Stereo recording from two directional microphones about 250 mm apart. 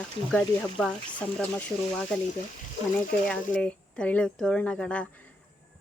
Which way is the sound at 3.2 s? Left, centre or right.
Centre.